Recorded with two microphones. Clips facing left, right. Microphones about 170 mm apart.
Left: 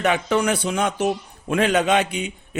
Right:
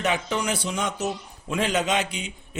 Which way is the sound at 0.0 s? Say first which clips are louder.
Left 6 dB; 55° left (ahead or behind).